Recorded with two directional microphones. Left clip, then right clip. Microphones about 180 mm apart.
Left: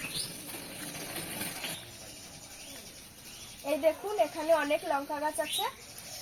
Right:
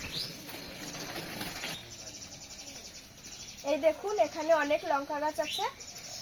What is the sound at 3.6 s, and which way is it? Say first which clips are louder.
Speech: even; 10° left (ahead or behind).